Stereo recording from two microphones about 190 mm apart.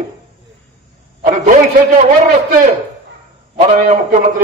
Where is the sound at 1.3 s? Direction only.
40° right (ahead or behind).